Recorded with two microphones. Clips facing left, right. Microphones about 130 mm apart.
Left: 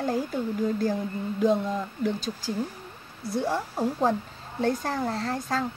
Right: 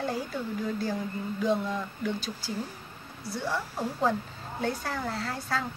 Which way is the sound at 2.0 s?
40° left (ahead or behind).